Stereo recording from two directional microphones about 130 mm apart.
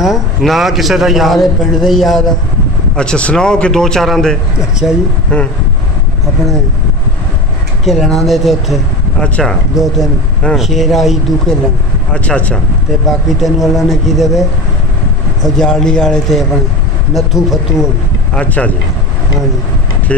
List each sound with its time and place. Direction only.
0.0 s speech: centre (ahead or behind)
7.8 s speech: centre (ahead or behind)
15.5 s speech: 5° left (ahead or behind)
18.3 s speech: 10° left (ahead or behind)
20.1 s speech: 10° left (ahead or behind)